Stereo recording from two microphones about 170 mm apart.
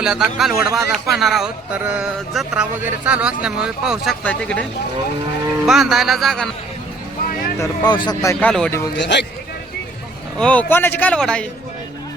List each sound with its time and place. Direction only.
0.0 s speech: 5° right (ahead or behind)
0.6 s speech: 20° right (ahead or behind)
0.9 s speech: centre (ahead or behind)
5.6 s speech: centre (ahead or behind)
7.6 s speech: 25° left (ahead or behind)
8.4 s speech: 5° left (ahead or behind)
9.0 s speech: 90° left
10.3 s speech: 5° left (ahead or behind)